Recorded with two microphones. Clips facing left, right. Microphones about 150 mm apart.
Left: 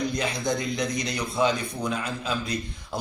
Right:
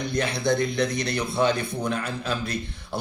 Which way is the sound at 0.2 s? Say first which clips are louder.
Right 4 dB; 60° right (ahead or behind).